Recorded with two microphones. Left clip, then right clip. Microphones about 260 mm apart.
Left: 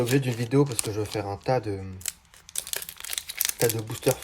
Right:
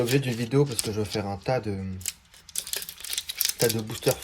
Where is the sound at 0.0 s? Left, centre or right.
Left.